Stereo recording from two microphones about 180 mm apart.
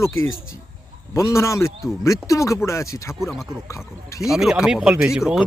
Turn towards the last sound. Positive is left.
turn(degrees=-5)  # may be behind; listen again after turning